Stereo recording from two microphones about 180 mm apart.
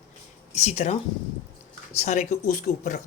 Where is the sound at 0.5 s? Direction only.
35° left (ahead or behind).